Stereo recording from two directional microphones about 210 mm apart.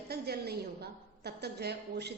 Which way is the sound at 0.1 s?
50° right (ahead or behind).